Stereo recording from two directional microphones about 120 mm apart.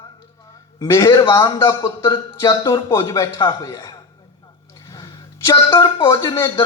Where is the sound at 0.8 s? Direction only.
25° left (ahead or behind).